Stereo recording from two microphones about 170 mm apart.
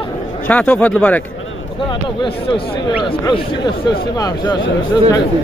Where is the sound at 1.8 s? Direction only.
30° left (ahead or behind).